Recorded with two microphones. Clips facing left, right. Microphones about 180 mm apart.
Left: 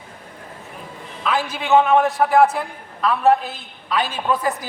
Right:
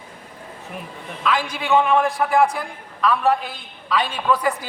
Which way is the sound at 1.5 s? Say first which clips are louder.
Left 4 dB; 20° left (ahead or behind).